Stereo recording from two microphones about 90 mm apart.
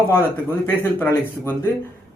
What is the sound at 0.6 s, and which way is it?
Speech, 20° left (ahead or behind).